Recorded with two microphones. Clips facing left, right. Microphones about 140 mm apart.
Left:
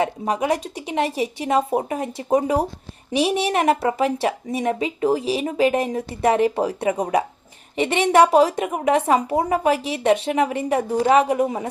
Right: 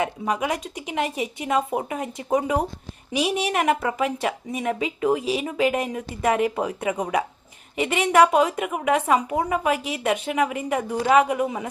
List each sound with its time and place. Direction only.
0.0 s a woman's voice: 30° left (ahead or behind)